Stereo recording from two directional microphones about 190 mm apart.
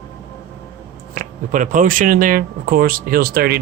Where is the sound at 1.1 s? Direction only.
45° right (ahead or behind).